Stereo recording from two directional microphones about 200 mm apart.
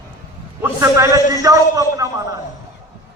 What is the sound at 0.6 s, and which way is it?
A man's voice, 15° right (ahead or behind).